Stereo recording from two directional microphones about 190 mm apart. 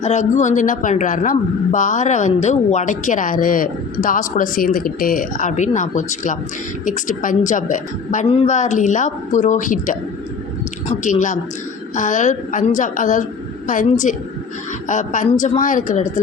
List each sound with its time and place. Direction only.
0.0 s a woman's voice: 40° left (ahead or behind)
11.0 s a woman's voice: 40° left (ahead or behind)